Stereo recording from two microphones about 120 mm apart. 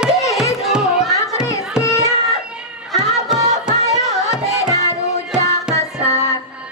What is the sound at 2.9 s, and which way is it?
Music, centre (ahead or behind).